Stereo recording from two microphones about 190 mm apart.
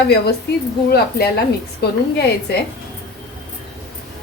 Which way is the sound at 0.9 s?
55° left (ahead or behind).